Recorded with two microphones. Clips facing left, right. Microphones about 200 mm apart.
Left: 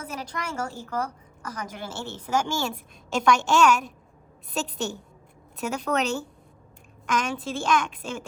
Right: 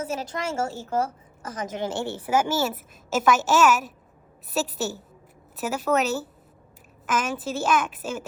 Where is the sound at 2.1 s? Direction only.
10° right (ahead or behind).